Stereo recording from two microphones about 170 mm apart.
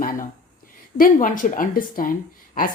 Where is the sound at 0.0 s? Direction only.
50° left (ahead or behind).